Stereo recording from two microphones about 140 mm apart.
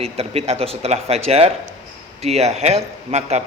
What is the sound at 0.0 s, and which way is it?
A man's voice, 45° right (ahead or behind).